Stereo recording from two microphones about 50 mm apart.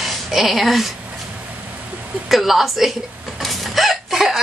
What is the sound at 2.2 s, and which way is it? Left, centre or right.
Speech, centre.